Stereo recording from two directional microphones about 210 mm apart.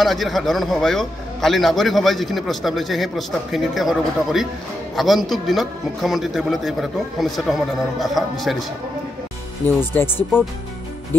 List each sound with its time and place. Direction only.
0.0 s a man's voice: centre (ahead or behind)
9.7 s speech: 10° left (ahead or behind)